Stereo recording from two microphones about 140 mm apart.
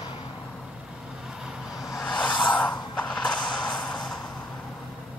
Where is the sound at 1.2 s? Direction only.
5° right (ahead or behind).